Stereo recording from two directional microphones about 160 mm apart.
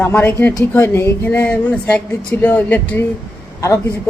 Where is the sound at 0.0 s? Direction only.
15° left (ahead or behind).